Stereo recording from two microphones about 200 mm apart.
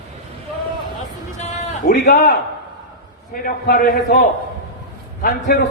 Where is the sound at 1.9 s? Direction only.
50° left (ahead or behind).